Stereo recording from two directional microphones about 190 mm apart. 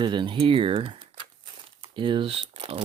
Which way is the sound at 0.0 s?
25° right (ahead or behind).